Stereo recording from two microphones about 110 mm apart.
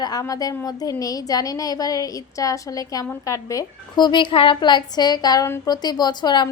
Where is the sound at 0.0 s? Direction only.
35° left (ahead or behind).